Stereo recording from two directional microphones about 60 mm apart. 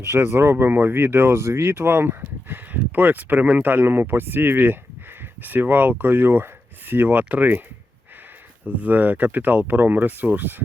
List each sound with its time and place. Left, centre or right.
0.0 s speech: right
1.4 s speech: right
8.6 s speech: right